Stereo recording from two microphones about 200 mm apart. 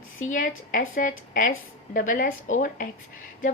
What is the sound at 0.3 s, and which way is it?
A woman's voice, 40° left (ahead or behind).